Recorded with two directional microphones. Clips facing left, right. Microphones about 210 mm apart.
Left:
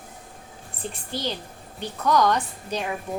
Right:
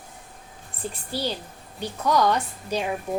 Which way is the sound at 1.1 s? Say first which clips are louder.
Right 1 dB; 10° right (ahead or behind).